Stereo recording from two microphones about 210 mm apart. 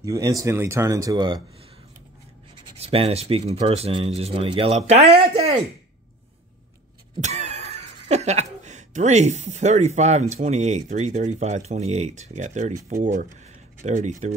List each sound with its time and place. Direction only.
0.0 s speech: 15° right (ahead or behind)
7.2 s speech: 35° right (ahead or behind)